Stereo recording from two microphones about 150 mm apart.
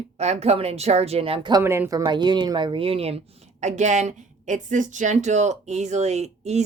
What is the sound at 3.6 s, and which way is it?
Speech, 50° right (ahead or behind).